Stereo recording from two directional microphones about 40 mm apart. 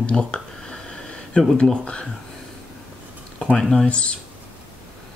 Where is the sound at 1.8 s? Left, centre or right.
Left.